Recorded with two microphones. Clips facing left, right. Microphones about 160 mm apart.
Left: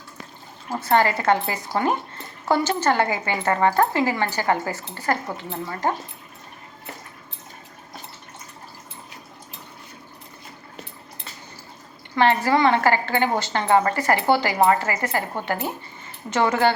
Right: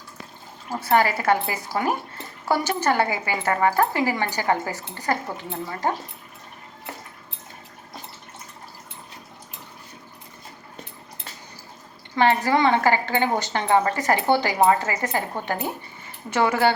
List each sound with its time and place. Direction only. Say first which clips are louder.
0.8 s speech: left 1 dB; 10° right (ahead or behind)
12.1 s speech: left 1 dB; 15° right (ahead or behind)